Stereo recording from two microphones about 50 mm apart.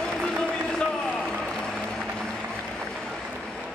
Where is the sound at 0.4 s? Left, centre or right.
Centre.